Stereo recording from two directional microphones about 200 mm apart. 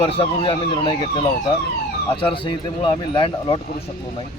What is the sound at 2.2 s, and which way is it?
Speech, 25° left (ahead or behind).